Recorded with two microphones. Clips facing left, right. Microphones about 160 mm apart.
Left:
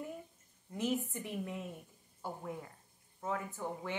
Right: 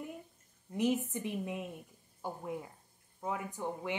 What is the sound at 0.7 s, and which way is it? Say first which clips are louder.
A woman's voice: right 4 dB; 15° right (ahead or behind).